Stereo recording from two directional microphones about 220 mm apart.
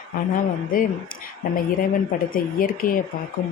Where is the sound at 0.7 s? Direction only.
40° left (ahead or behind).